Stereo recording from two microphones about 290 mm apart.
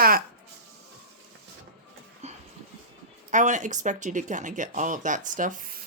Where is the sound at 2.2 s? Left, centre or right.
Right.